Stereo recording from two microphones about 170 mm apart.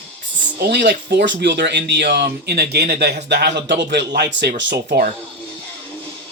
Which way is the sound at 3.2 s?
85° right.